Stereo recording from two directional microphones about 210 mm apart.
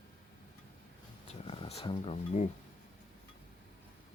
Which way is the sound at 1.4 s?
25° left (ahead or behind).